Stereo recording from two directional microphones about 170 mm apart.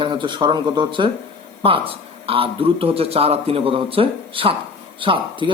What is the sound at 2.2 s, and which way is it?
A man's voice, 35° right (ahead or behind).